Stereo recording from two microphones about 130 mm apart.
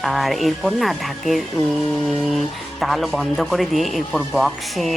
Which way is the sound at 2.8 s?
Centre (ahead or behind).